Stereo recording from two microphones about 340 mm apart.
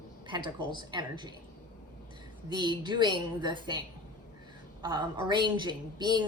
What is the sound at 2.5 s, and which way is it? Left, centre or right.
A woman's voice, centre.